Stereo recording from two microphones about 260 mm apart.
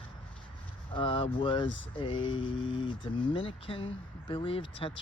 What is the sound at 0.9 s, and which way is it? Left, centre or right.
Speech, centre.